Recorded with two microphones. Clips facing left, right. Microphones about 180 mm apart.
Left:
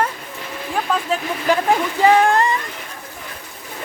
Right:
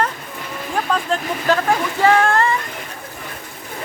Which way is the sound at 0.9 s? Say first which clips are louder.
Even; 5° left (ahead or behind).